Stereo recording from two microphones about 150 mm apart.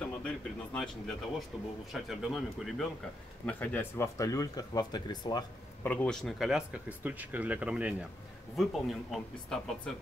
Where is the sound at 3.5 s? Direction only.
10° left (ahead or behind); by 5.4 s 30° left (ahead or behind).